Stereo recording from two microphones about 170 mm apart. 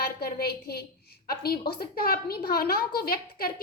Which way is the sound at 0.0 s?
65° left (ahead or behind).